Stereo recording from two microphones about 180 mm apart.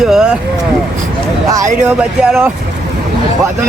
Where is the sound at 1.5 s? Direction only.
15° right (ahead or behind).